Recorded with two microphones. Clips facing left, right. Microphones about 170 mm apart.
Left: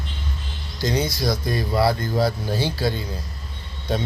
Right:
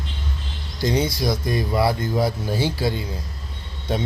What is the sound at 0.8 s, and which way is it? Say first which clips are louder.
Speech: right 1 dB; 25° right (ahead or behind).